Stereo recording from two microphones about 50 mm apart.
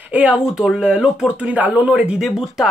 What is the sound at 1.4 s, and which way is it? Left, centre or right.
Speech, right.